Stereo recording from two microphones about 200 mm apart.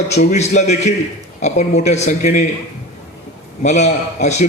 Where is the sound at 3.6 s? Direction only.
35° left (ahead or behind).